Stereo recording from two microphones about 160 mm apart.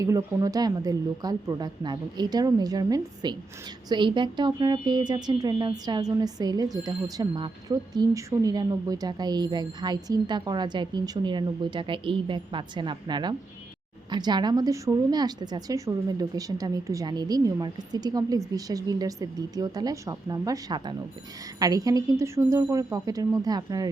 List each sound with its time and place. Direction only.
0.0 s speech: 20° right (ahead or behind)